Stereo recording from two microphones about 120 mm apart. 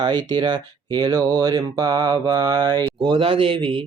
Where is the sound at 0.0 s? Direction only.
40° right (ahead or behind).